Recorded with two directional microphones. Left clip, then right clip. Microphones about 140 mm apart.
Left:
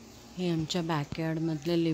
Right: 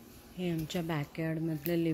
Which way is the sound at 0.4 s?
20° left (ahead or behind).